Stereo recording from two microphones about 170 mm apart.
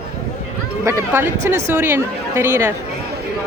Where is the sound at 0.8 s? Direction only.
15° right (ahead or behind).